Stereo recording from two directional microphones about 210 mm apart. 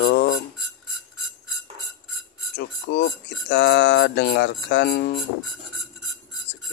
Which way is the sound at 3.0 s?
55° left (ahead or behind).